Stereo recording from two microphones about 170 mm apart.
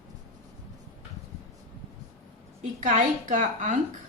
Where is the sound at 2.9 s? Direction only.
45° right (ahead or behind).